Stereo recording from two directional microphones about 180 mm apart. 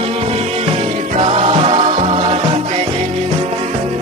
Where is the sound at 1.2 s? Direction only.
35° right (ahead or behind).